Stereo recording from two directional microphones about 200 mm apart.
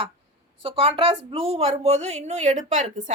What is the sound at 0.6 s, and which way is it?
A woman's voice, 25° right (ahead or behind).